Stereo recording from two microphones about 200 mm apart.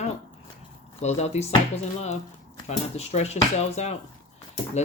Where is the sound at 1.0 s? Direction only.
35° left (ahead or behind).